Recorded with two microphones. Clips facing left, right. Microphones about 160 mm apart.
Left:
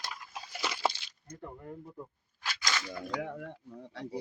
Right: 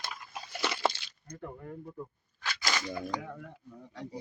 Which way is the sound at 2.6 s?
15° right (ahead or behind).